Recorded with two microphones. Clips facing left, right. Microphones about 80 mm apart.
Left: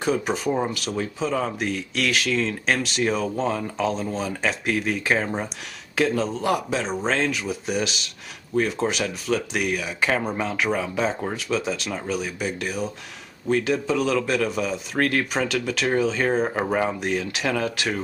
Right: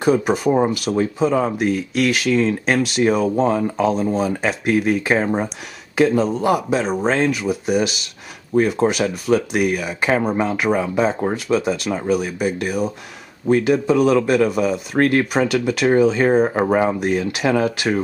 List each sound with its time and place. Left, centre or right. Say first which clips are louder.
0.0 s speech: right 7 dB; centre
10.6 s speech: right 4 dB; centre
17.0 s speech: right 6 dB; centre